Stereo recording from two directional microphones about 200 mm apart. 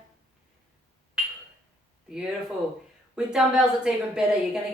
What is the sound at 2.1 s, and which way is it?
A woman's voice, 5° right (ahead or behind).